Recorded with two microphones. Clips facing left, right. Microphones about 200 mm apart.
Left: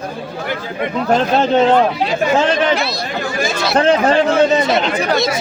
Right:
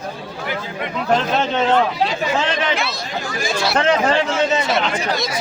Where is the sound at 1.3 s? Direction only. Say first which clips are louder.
Left 8 dB; 35° left (ahead or behind).